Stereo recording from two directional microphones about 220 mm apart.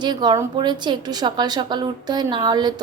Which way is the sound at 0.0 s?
20° right (ahead or behind).